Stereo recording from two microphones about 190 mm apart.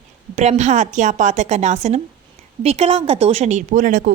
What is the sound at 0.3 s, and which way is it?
A woman's voice, 40° right (ahead or behind).